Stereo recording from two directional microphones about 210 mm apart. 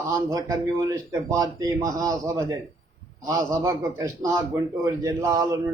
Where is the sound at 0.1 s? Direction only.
15° right (ahead or behind).